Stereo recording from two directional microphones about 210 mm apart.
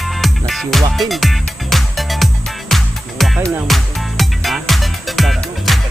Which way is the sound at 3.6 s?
Centre (ahead or behind).